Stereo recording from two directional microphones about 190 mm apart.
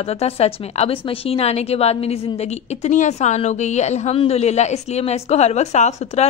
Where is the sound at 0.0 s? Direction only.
35° left (ahead or behind).